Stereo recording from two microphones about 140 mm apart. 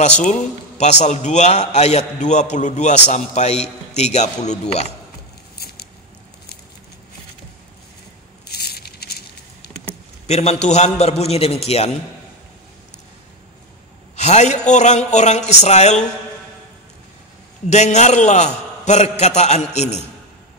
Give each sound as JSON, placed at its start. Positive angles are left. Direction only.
{"t": 0.2, "sound": "a man's voice", "side_deg": 55}
{"t": 10.2, "sound": "a man's voice", "side_deg": 50}
{"t": 14.1, "sound": "a man's voice", "side_deg": 55}
{"t": 17.6, "sound": "a man's voice", "side_deg": 55}